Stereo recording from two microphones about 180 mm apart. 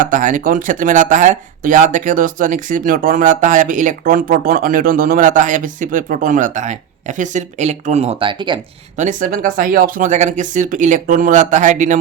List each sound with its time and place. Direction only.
0.1 s speech: 45° right (ahead or behind); by 8.6 s 25° right (ahead or behind)
9.0 s speech: 45° right (ahead or behind)